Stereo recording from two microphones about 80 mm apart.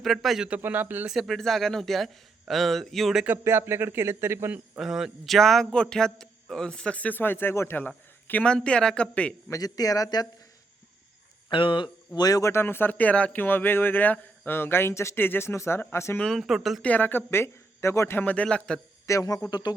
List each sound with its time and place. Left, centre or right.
0.0 s speech: centre
0.6 s speech: right
1.0 s speech: centre
3.3 s speech: right
4.8 s a man's voice: centre
9.5 s speech: left
11.5 s speech: left
12.2 s speech: left
12.5 s a man's voice: left
16.3 s speech: centre
16.8 s a man's voice: centre
18.4 s a man's voice: centre
19.0 s speech: left